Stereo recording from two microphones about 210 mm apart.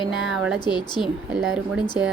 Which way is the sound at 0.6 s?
20° left (ahead or behind).